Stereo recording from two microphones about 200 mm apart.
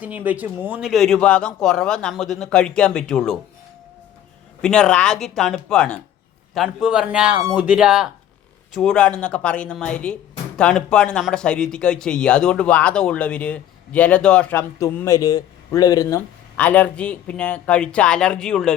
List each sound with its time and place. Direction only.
0.0 s speech: 10° right (ahead or behind)
4.6 s speech: 5° left (ahead or behind)